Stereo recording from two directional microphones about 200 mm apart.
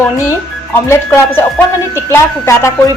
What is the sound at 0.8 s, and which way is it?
A woman's voice, 10° left (ahead or behind).